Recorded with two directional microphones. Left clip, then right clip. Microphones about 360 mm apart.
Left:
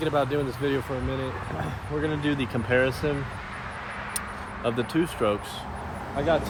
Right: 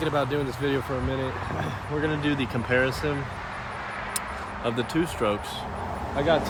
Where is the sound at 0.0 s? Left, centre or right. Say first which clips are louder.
Left 1 dB; centre.